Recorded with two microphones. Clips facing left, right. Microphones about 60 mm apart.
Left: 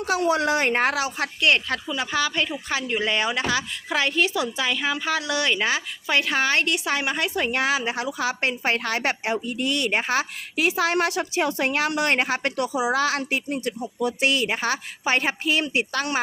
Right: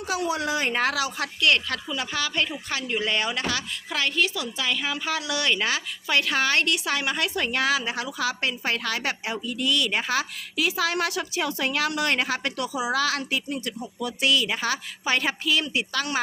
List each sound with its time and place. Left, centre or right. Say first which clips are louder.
0.0 s speech: left 5 dB; left
0.8 s a woman's voice: left 2 dB; left
1.4 s speech: left 1 dB; centre
2.0 s speech: left 3 dB; centre; by 4.6 s left
4.6 s a woman's voice: right 1 dB; centre
7.5 s a woman's voice: left 1 dB; left
8.0 s a woman's voice: left 2 dB; left